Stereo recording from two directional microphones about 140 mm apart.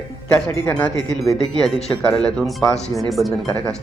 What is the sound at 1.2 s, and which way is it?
Speech, centre (ahead or behind).